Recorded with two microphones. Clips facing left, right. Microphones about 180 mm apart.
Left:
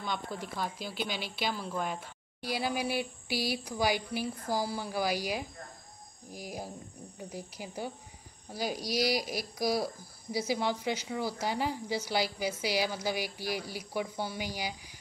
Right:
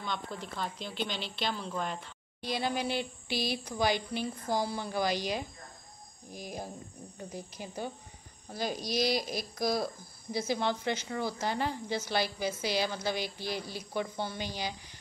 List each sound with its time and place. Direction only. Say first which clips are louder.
0.0 s speech: left 1 dB; 5° left (ahead or behind)